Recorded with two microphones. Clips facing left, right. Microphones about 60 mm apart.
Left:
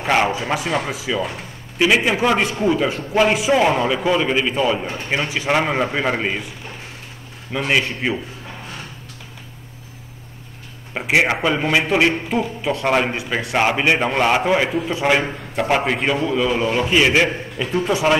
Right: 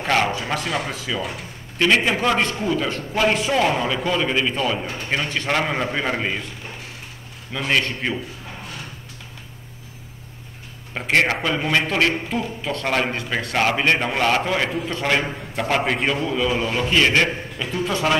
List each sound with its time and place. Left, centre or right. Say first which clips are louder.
0.0 s a man's voice: left 2 dB; centre
7.5 s a man's voice: left 2 dB; centre
10.9 s a man's voice: left 2 dB; centre
17.6 s a man's voice: left 5 dB; left